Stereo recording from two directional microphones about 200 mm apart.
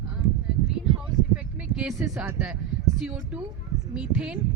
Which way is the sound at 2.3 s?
5° right (ahead or behind).